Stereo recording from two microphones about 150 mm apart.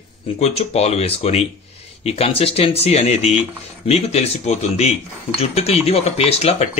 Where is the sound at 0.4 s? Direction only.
45° left (ahead or behind).